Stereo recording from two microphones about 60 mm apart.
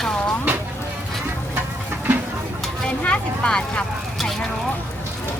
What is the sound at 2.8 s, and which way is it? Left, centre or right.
Speech, centre.